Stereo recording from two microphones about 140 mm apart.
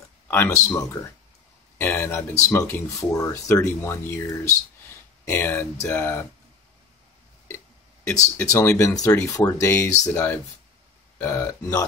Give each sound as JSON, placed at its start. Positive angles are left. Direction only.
{"t": 0.3, "sound": "speech", "side_deg": 20}
{"t": 8.4, "sound": "speech", "side_deg": 20}